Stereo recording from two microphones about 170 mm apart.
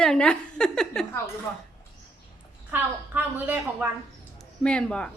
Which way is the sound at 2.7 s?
10° right (ahead or behind).